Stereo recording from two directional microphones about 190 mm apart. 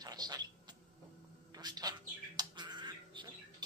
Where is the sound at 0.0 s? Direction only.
20° right (ahead or behind).